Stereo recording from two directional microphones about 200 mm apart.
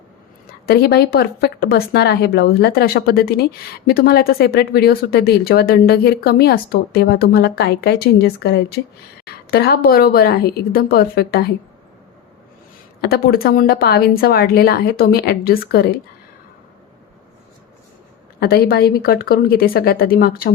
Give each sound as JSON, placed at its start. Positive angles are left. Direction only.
{"t": 0.6, "sound": "speech", "side_deg": 50}
{"t": 13.0, "sound": "speech", "side_deg": 50}
{"t": 18.3, "sound": "speech", "side_deg": 50}